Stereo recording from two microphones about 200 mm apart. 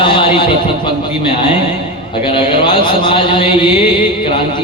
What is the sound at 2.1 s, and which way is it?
A man's voice, 25° left (ahead or behind).